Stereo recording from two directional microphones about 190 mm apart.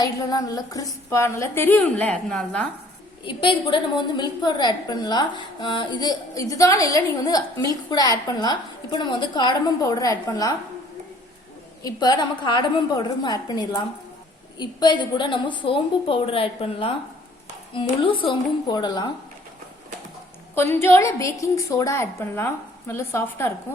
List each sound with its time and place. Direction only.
0.0 s a woman's voice: 20° left (ahead or behind)
3.2 s a woman's voice: 25° left (ahead or behind)
11.8 s a woman's voice: 20° left (ahead or behind)
20.7 s a woman's voice: 15° left (ahead or behind)